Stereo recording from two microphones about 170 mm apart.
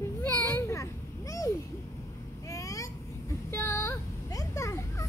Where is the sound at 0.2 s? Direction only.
15° left (ahead or behind).